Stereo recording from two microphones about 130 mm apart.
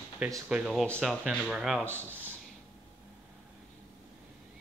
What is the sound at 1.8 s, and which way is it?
Speech, 15° right (ahead or behind).